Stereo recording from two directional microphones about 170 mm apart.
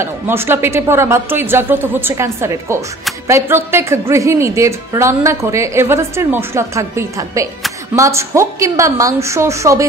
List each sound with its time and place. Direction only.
0.0 s a woman's voice: 15° right (ahead or behind)